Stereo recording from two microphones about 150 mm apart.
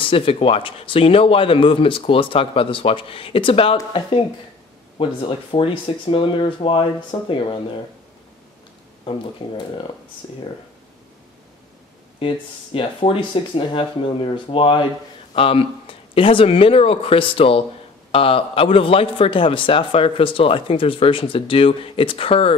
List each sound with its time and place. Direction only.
0.0 s a man's voice: 35° left (ahead or behind)
4.9 s a man's voice: 40° left (ahead or behind)
9.4 s a man's voice: 30° left (ahead or behind)
12.2 s a man's voice: 35° left (ahead or behind)